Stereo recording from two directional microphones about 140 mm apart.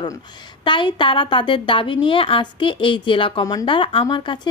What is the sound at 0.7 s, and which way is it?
A woman's voice, 35° left (ahead or behind).